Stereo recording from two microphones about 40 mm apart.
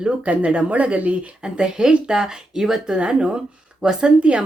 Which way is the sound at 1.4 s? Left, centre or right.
Right.